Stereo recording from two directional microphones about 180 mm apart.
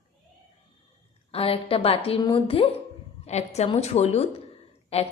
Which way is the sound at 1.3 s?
30° left (ahead or behind).